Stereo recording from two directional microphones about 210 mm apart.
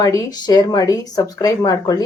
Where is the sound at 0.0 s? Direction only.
15° left (ahead or behind).